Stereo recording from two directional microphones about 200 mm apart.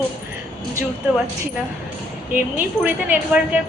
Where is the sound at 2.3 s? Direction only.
10° right (ahead or behind).